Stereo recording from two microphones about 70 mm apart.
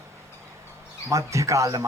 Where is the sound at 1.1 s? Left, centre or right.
Right.